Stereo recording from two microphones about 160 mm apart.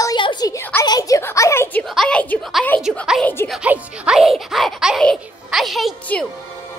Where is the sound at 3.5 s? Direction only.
5° right (ahead or behind).